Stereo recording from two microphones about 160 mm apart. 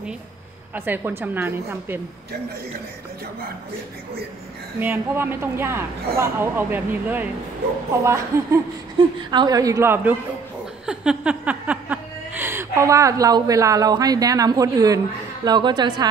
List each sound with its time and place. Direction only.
0.7 s a woman's voice: 10° right (ahead or behind)
4.7 s a woman's voice: 10° right (ahead or behind)
8.9 s speech: 30° right (ahead or behind)